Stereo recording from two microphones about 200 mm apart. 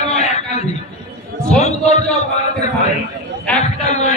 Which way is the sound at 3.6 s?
35° left (ahead or behind).